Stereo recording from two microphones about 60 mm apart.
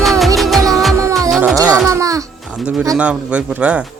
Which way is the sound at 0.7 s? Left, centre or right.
Centre.